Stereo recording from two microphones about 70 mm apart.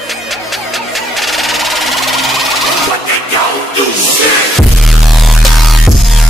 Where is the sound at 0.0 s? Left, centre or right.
Centre.